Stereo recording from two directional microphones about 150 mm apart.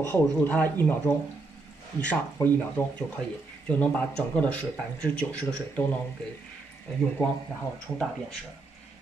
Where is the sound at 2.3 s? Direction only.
15° left (ahead or behind).